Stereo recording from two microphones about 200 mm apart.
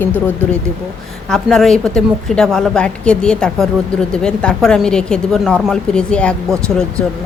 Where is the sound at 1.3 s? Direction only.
Centre (ahead or behind).